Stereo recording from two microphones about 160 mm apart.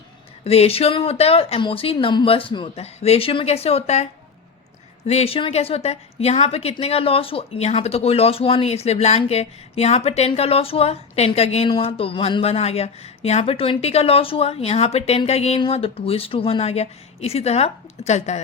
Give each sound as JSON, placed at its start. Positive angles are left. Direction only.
{"t": 0.4, "sound": "a woman's voice", "side_deg": 40}